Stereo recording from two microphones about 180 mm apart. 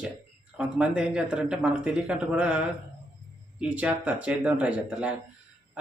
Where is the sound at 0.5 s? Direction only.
5° right (ahead or behind).